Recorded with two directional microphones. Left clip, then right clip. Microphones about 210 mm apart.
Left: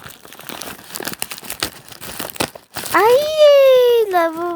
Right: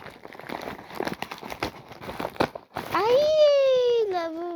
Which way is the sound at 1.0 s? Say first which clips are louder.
Left 5 dB; 50° left (ahead or behind).